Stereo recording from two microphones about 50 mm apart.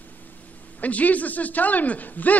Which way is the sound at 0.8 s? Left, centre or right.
Left.